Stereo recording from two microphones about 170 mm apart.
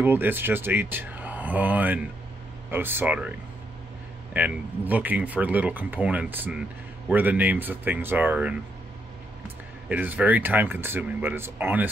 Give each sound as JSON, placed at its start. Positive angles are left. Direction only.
{"t": 0.0, "sound": "speech", "side_deg": -10}
{"t": 9.8, "sound": "speech", "side_deg": -10}